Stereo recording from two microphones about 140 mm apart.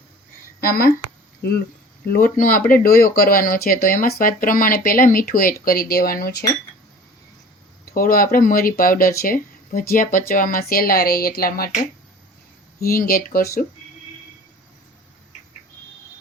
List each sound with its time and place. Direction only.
0.6 s speech: 90° left
2.0 s speech: 90° left
7.9 s speech: 85° left
12.8 s speech: 90° left